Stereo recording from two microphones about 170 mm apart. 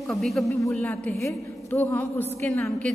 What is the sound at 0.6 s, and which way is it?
A woman's voice, 20° left (ahead or behind).